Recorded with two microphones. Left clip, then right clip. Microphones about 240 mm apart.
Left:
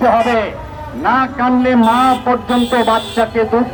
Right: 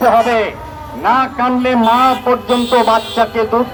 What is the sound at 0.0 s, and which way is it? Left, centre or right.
A man's voice, right.